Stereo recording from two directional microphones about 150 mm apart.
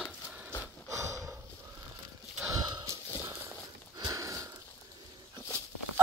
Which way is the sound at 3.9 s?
25° right (ahead or behind).